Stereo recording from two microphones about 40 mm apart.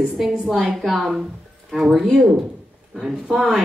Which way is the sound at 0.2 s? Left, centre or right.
Centre.